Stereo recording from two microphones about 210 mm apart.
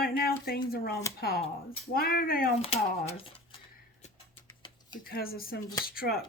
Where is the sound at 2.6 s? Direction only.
30° left (ahead or behind).